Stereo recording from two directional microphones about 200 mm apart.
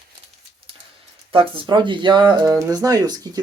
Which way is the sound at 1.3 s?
25° right (ahead or behind).